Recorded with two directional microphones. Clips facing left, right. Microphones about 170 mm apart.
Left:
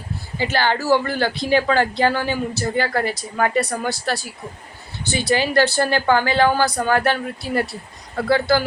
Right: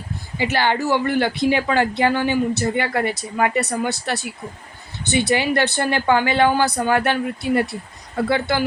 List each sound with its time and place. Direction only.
0.3 s speech: 20° right (ahead or behind)